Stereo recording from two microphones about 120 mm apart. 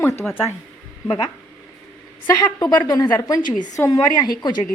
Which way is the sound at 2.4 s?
35° left (ahead or behind).